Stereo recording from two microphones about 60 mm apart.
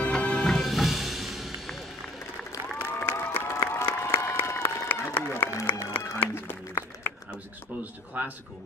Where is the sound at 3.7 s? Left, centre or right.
Left.